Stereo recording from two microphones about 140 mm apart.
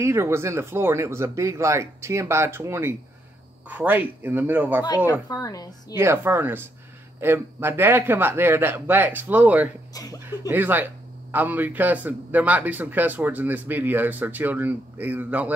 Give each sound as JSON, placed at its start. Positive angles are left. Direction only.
{"t": 0.0, "sound": "a man's voice", "side_deg": -20}
{"t": 5.3, "sound": "a woman's voice", "side_deg": 25}
{"t": 5.9, "sound": "a man's voice", "side_deg": -15}
{"t": 9.9, "sound": "a woman's voice", "side_deg": 25}
{"t": 10.5, "sound": "a man's voice", "side_deg": -15}